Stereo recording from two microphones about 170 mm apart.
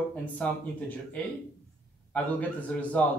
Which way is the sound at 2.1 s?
10° left (ahead or behind).